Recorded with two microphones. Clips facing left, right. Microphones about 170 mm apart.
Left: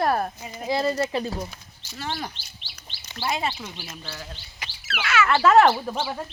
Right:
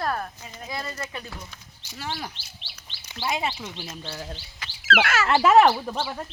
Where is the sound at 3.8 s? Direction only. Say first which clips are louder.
Right 2 dB; 25° right (ahead or behind).